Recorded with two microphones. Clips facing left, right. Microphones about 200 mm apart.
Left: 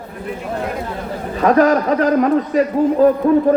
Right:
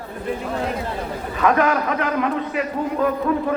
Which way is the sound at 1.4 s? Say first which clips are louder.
Left 6 dB; 35° left (ahead or behind).